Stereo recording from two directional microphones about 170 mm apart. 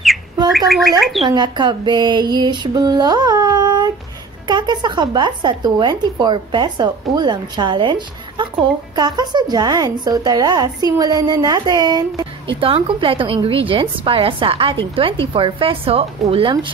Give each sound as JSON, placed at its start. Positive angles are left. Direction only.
{"t": 0.5, "sound": "speech", "side_deg": 0}
{"t": 1.2, "sound": "a woman's voice", "side_deg": -25}